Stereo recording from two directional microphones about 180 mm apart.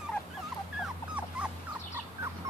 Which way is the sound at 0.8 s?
5° right (ahead or behind).